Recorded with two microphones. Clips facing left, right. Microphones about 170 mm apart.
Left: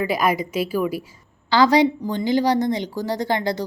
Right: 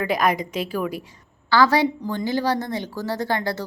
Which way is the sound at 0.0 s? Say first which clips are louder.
Left 1 dB; 5° left (ahead or behind).